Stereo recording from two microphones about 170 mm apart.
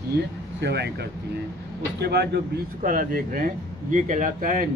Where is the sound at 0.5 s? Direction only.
85° right.